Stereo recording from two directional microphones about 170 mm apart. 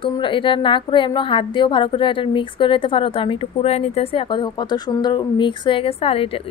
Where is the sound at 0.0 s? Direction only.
30° left (ahead or behind).